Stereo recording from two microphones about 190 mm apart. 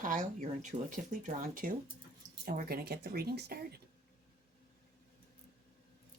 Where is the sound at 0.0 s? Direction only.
45° right (ahead or behind).